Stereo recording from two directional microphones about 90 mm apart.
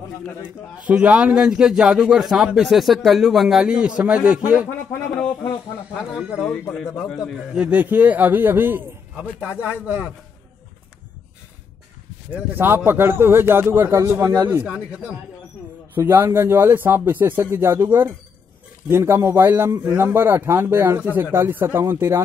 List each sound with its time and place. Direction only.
0.8 s speech: 15° right (ahead or behind)
4.6 s speech: 15° left (ahead or behind)
6.1 s a man's voice: 10° right (ahead or behind)
12.3 s a man's voice: 25° right (ahead or behind)
14.5 s speech: 15° right (ahead or behind)
16.0 s a man's voice: 30° right (ahead or behind)